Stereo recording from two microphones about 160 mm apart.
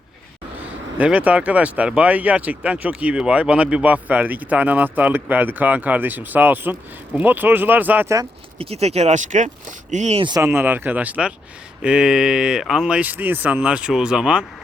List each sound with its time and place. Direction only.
0.9 s speech: 10° right (ahead or behind)
8.5 s speech: 40° right (ahead or behind)
10.2 s speech: 20° right (ahead or behind)